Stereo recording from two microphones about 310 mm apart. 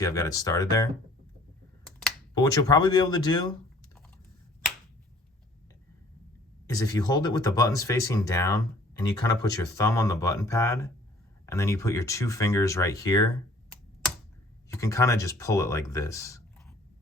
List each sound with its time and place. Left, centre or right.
0.0 s speech: centre
1.8 s a sound: centre
2.3 s speech: centre
6.7 s speech: centre